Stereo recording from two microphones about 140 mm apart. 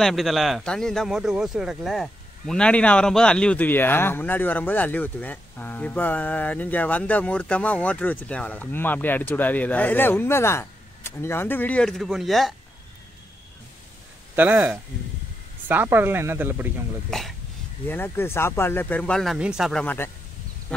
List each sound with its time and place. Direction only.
0.0 s a man's voice: centre (ahead or behind)
14.3 s speech: 15° right (ahead or behind)
17.1 s speech: 5° left (ahead or behind)
17.8 s a man's voice: 15° left (ahead or behind)
19.3 s speech: 5° right (ahead or behind)
19.8 s a man's voice: 10° left (ahead or behind)